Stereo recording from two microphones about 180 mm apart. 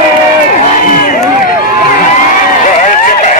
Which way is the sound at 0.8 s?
50° left (ahead or behind).